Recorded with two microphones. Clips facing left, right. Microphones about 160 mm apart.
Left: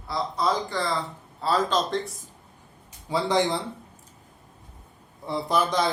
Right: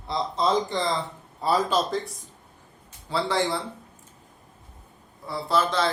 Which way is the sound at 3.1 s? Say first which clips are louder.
Left 2 dB; 15° left (ahead or behind).